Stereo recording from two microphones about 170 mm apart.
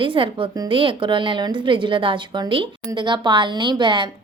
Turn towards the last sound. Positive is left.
turn(degrees=-30)  # may be behind; listen again after turning